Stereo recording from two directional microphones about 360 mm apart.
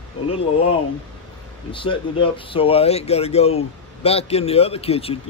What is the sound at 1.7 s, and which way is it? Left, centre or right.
Speech, centre.